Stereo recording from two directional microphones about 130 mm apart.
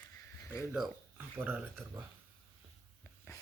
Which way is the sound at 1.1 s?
10° right (ahead or behind).